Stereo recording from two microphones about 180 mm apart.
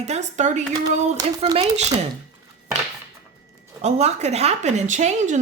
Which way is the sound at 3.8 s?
35° right (ahead or behind).